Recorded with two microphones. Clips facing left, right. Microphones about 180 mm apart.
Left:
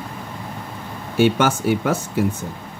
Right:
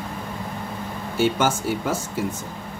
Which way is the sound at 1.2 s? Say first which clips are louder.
Left 4 dB; 65° left (ahead or behind).